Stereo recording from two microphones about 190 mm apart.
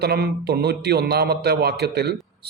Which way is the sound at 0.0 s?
55° right (ahead or behind).